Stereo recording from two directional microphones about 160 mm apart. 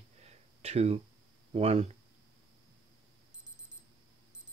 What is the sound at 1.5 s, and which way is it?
Speech, 40° right (ahead or behind).